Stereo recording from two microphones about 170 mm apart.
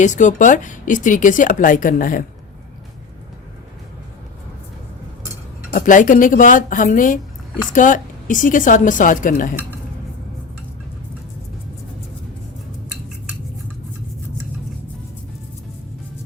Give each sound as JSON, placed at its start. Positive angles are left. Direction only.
{"t": 0.0, "sound": "speech", "side_deg": 45}
{"t": 5.7, "sound": "speech", "side_deg": 50}